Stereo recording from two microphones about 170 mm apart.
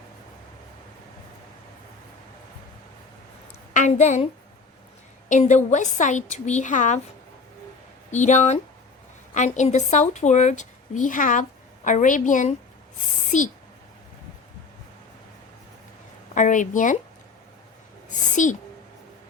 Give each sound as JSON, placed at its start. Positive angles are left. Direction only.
{"t": 3.8, "sound": "a woman's voice", "side_deg": 45}
{"t": 5.3, "sound": "a woman's voice", "side_deg": 45}
{"t": 8.1, "sound": "a woman's voice", "side_deg": 45}
{"t": 16.3, "sound": "a woman's voice", "side_deg": 45}
{"t": 18.4, "sound": "a woman's voice", "side_deg": 50}